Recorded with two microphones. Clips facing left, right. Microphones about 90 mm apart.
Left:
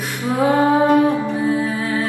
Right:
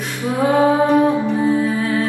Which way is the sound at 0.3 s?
15° left (ahead or behind).